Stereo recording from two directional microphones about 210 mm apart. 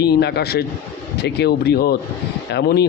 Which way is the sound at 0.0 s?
50° left (ahead or behind).